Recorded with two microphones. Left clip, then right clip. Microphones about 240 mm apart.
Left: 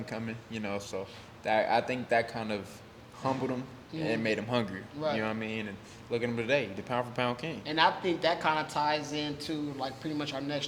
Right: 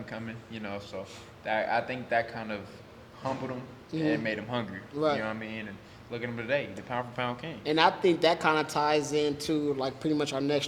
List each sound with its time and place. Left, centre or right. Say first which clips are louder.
0.1 s speech: left 2 dB; left
4.0 s speech: right 1 dB; left
4.9 s speech: right 4 dB; right
5.2 s speech: left 1 dB; left
7.6 s speech: right 3 dB; right